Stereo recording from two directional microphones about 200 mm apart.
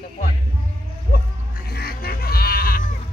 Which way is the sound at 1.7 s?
50° left (ahead or behind).